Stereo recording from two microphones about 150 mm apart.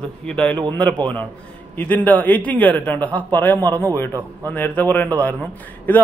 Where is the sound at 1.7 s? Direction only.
10° left (ahead or behind).